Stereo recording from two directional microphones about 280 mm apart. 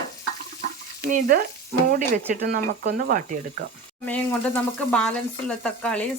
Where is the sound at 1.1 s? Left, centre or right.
Right.